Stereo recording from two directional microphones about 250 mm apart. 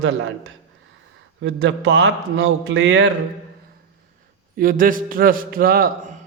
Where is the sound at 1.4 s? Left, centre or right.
Right.